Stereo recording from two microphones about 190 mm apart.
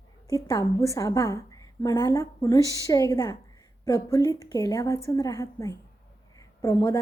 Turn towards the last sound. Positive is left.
turn(degrees=20)  # may be behind; listen again after turning